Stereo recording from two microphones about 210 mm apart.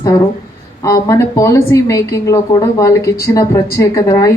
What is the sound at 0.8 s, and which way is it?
Speech, 15° left (ahead or behind).